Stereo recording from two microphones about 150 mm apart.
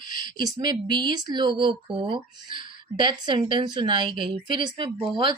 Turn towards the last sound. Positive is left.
turn(degrees=-30)  # may be behind; listen again after turning